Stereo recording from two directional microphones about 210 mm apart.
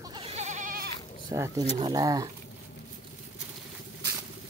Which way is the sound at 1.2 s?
15° right (ahead or behind).